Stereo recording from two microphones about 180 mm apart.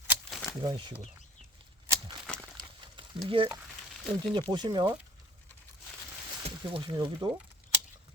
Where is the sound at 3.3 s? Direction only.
30° right (ahead or behind).